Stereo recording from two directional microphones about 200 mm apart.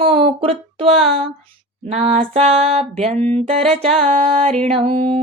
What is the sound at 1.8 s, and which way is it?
Speech, 30° right (ahead or behind).